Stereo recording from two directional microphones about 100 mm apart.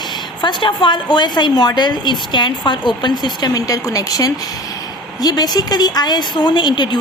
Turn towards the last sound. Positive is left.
turn(degrees=50)  # may be behind; listen again after turning